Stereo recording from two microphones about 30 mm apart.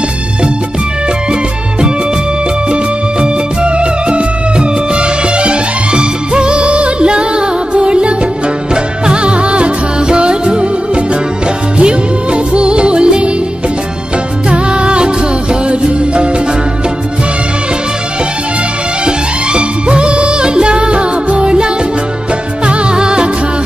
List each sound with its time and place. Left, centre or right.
2.7 s music: right
14.7 s music: right
19.0 s music of bollywood: right
22.7 s music: right